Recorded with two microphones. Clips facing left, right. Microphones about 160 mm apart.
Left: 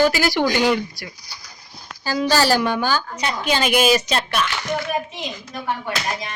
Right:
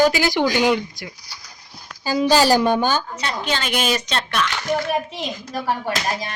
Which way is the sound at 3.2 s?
15° left (ahead or behind).